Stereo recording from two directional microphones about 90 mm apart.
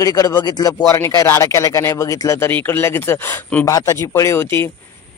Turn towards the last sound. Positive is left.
turn(degrees=25)  # may be behind; listen again after turning